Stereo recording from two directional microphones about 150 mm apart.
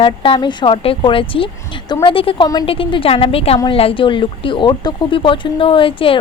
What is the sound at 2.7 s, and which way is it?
Speech, 35° left (ahead or behind).